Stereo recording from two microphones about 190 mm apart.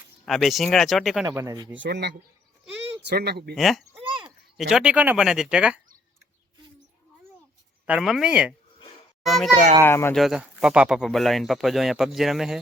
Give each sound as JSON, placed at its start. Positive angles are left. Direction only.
{"t": 0.3, "sound": "speech", "side_deg": 0}
{"t": 1.4, "sound": "speech", "side_deg": -20}
{"t": 1.7, "sound": "speech", "side_deg": -70}
{"t": 3.5, "sound": "speech", "side_deg": 0}
{"t": 7.9, "sound": "speech", "side_deg": -5}
{"t": 9.8, "sound": "speech", "side_deg": 10}
{"t": 10.2, "sound": "speech", "side_deg": 0}